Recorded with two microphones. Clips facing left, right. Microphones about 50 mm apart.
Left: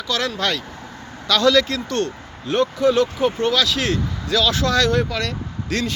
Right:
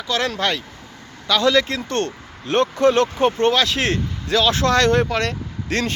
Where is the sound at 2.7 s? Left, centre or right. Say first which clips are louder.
Right 2 dB; right.